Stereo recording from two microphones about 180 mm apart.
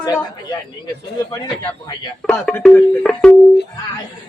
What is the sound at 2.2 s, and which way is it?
Speech, centre (ahead or behind).